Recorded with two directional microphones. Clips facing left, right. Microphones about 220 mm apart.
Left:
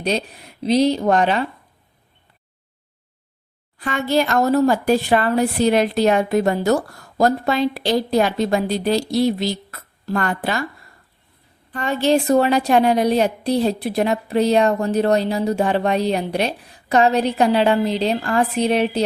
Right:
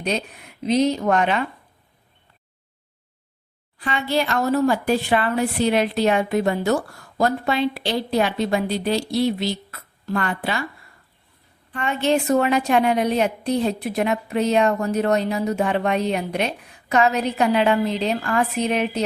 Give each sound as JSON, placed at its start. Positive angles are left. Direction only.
{"t": 0.0, "sound": "a woman's voice", "side_deg": 35}
{"t": 3.8, "sound": "a woman's voice", "side_deg": 45}
{"t": 11.7, "sound": "a woman's voice", "side_deg": 35}